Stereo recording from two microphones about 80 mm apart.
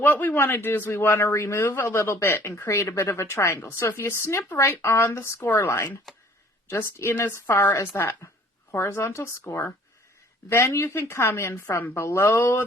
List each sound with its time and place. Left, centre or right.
0.0 s speech: left
10.5 s speech: left